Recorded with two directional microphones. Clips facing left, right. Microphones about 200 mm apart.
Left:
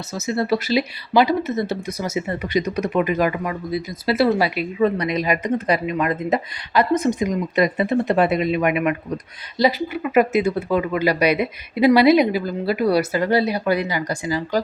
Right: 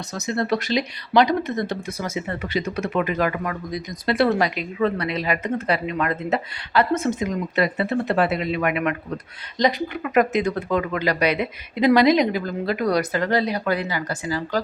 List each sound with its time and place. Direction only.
0.1 s speech: 5° left (ahead or behind)